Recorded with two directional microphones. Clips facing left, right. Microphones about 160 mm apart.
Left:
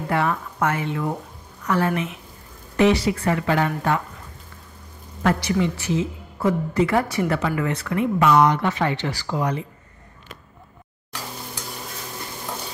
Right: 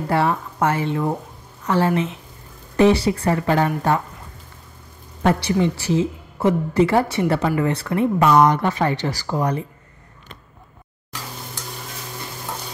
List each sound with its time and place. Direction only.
0.1 s a woman's voice: 30° right (ahead or behind)
5.2 s a woman's voice: 30° right (ahead or behind)